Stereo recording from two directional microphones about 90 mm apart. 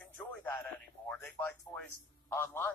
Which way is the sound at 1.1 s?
15° left (ahead or behind).